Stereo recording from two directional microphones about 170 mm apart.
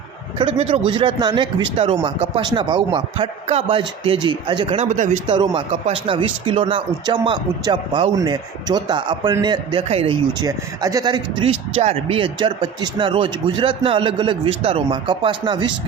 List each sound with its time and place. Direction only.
0.3 s a man's voice: 30° right (ahead or behind)
10.4 s speech: 20° right (ahead or behind)
11.8 s speech: 40° right (ahead or behind)